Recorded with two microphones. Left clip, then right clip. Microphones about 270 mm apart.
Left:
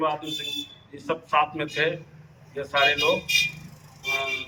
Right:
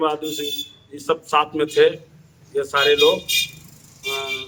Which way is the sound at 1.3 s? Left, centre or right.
Centre.